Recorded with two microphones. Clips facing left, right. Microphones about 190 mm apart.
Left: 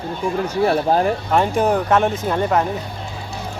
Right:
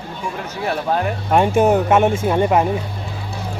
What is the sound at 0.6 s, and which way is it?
Speech, 35° left (ahead or behind).